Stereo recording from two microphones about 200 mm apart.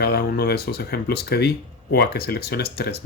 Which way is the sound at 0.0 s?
50° left (ahead or behind).